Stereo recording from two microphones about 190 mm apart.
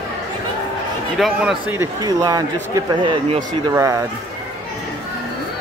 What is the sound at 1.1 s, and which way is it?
Speech, centre (ahead or behind).